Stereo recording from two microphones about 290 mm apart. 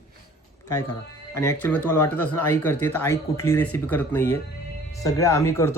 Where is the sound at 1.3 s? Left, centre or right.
Centre.